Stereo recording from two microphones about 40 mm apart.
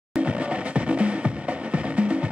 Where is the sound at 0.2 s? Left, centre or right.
Right.